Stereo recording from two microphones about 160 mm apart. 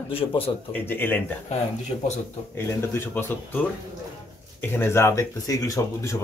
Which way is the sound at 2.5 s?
15° left (ahead or behind).